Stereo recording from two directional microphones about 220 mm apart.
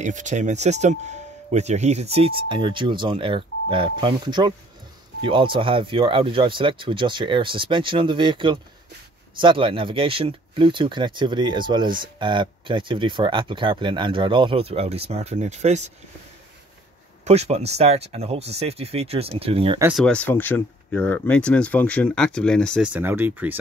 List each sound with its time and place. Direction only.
0.0 s speech: 35° right (ahead or behind)
17.2 s speech: 30° right (ahead or behind)
19.8 s speech: centre (ahead or behind)
22.9 s speech: 10° right (ahead or behind)